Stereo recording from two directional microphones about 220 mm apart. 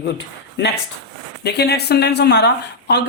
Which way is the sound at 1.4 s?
50° left (ahead or behind).